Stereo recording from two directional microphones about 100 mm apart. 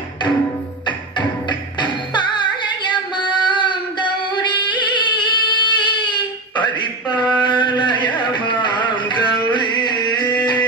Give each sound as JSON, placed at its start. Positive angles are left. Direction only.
{"t": 1.8, "sound": "music", "side_deg": 50}